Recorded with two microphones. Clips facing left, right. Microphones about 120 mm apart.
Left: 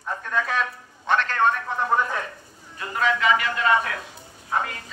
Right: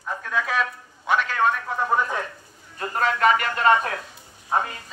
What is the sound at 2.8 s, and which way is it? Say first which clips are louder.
A man's voice: right 2 dB; 45° right (ahead or behind).